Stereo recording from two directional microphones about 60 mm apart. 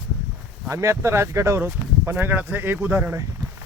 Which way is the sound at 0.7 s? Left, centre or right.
Right.